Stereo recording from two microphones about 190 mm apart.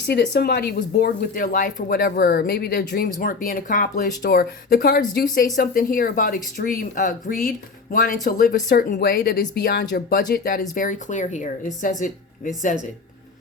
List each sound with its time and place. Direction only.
0.0 s speech: 60° left (ahead or behind); by 12.9 s 40° left (ahead or behind)